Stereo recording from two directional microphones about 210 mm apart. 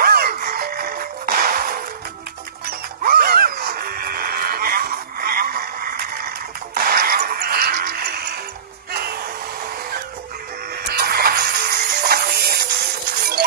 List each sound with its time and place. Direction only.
0.0 s music: 45° right (ahead or behind)
3.0 s a sound: 45° right (ahead or behind)
8.9 s hair dryer: 45° right (ahead or behind)
10.9 s music: 45° right (ahead or behind)